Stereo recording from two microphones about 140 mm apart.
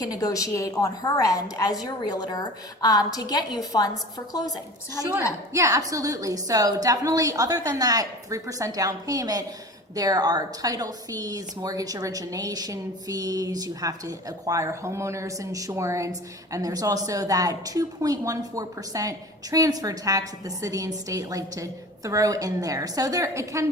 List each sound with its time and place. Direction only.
0.0 s a woman's voice: 25° left (ahead or behind)
5.5 s a woman's voice: 25° right (ahead or behind)